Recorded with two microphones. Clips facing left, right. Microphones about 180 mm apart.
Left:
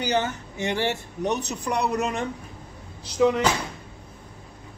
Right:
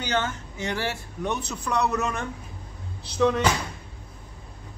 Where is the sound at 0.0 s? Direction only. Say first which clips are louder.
Left 3 dB; 15° left (ahead or behind).